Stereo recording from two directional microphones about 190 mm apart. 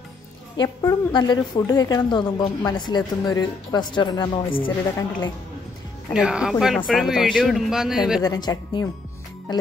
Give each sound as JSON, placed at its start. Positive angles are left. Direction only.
{"t": 0.6, "sound": "a woman's voice", "side_deg": 20}
{"t": 6.1, "sound": "speech", "side_deg": -5}
{"t": 8.2, "sound": "a woman's voice", "side_deg": 20}